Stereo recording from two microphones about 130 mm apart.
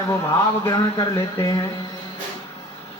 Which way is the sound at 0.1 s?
20° left (ahead or behind).